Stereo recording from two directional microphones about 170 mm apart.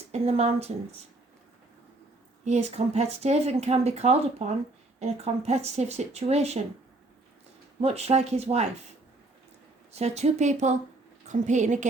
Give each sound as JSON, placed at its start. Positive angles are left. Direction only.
{"t": 0.1, "sound": "speech", "side_deg": -40}
{"t": 2.4, "sound": "speech", "side_deg": -40}
{"t": 7.8, "sound": "speech", "side_deg": -40}
{"t": 9.9, "sound": "speech", "side_deg": -40}